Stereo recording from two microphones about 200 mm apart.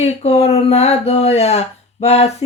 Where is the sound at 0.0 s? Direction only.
30° left (ahead or behind).